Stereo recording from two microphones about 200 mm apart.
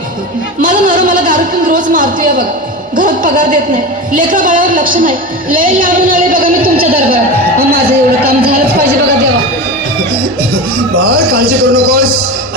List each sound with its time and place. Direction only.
0.6 s a man's voice: 40° right (ahead or behind)
10.5 s a man's voice: 45° right (ahead or behind)